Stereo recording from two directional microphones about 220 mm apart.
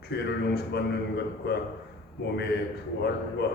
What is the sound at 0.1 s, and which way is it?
A man's voice, 50° left (ahead or behind).